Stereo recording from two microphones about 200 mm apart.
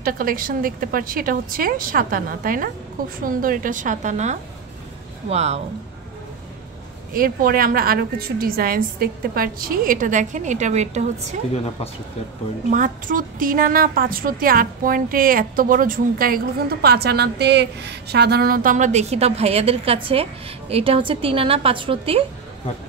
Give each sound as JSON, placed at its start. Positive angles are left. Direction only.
{"t": 0.0, "sound": "a woman's voice", "side_deg": -45}
{"t": 7.2, "sound": "a woman's voice", "side_deg": -45}
{"t": 12.6, "sound": "a woman's voice", "side_deg": -40}